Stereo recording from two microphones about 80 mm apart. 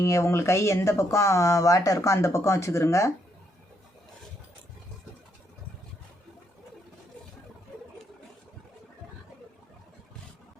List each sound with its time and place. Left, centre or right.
0.0 s speech: left